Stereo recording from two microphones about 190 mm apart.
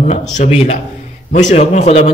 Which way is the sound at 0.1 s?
35° left (ahead or behind).